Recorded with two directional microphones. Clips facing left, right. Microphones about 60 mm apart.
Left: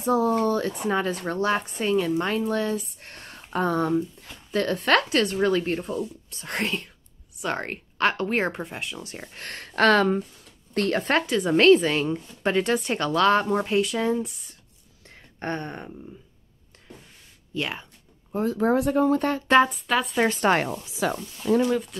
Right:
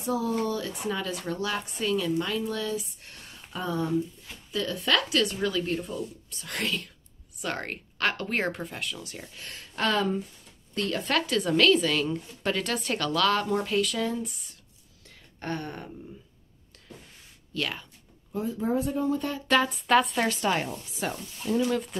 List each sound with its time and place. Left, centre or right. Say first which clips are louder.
0.0 s a woman's voice: left 6 dB; left
9.4 s speech: left 8 dB; left
10.7 s speech: left 6 dB; left
11.1 s speech: left 3 dB; left
11.6 s speech: left 7 dB; left
15.0 s a sound: left 4 dB; left
17.6 s speech: left 2 dB; left
18.4 s speech: left 6 dB; left
19.4 s speech: left 6 dB; left
19.7 s speech: right 3 dB; centre
20.3 s speech: left 6 dB; left
20.6 s speech: left 5 dB; left